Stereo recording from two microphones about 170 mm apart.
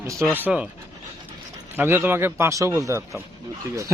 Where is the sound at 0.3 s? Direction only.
10° right (ahead or behind).